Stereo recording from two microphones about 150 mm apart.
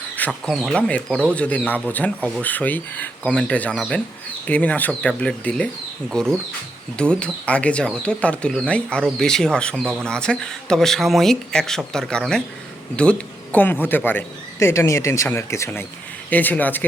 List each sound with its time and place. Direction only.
0.2 s speech: 5° left (ahead or behind)